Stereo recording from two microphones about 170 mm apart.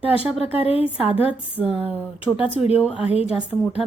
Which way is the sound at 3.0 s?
40° left (ahead or behind).